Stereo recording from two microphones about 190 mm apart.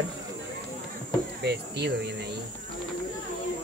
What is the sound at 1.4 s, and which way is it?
Speech, 60° right (ahead or behind).